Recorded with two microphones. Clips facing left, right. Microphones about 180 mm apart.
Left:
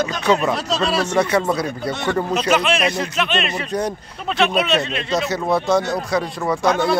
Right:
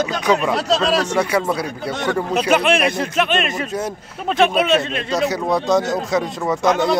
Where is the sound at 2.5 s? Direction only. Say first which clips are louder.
Right 3 dB; 55° right (ahead or behind).